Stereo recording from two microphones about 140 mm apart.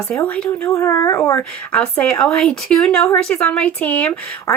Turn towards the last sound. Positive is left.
turn(degrees=10)  # may be behind; listen again after turning